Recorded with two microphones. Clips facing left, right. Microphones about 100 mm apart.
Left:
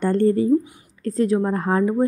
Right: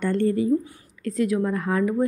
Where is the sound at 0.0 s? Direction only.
35° left (ahead or behind).